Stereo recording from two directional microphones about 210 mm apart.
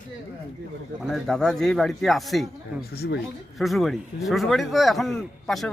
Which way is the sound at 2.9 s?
50° left (ahead or behind).